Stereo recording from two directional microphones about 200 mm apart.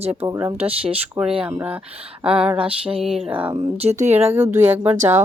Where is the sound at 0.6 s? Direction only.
30° right (ahead or behind).